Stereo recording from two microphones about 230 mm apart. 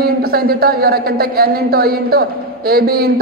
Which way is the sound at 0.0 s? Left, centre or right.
Right.